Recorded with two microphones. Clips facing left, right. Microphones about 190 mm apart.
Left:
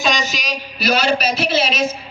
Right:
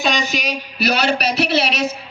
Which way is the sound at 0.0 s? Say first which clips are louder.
Right 1 dB; 60° right (ahead or behind).